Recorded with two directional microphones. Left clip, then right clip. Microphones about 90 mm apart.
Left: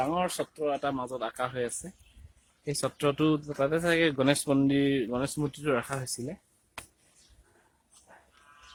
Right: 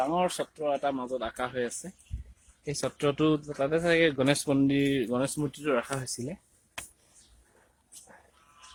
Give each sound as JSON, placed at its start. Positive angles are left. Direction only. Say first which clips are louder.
{"t": 0.2, "sound": "speech", "louder": "right 1 dB", "side_deg": 40}
{"t": 5.0, "sound": "speech", "louder": "right 2 dB", "side_deg": 5}
{"t": 6.1, "sound": "speech", "louder": "even", "side_deg": 15}